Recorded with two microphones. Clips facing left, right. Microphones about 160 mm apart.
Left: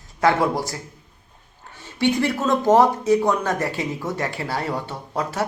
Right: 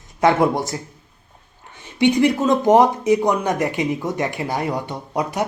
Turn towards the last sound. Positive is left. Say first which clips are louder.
# right 2 dB
turn(degrees=-15)  # may be behind; listen again after turning